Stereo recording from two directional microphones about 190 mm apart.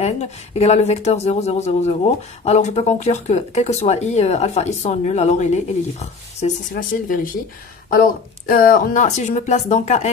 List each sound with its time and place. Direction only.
0.0 s speech: 35° left (ahead or behind)